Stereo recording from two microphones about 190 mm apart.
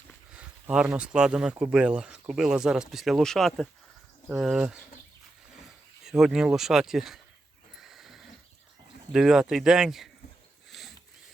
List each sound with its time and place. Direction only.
0.3 s speech: 5° right (ahead or behind)
6.1 s speech: 5° right (ahead or behind)
7.8 s horse: centre (ahead or behind)
9.1 s speech: 5° right (ahead or behind)
10.7 s sniff: centre (ahead or behind)